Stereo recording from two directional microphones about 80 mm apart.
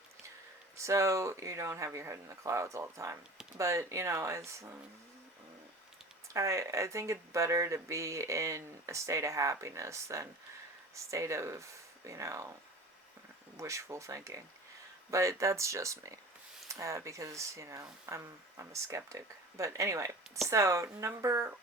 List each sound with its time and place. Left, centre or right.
0.8 s speech: right
6.2 s speech: right
13.6 s speech: right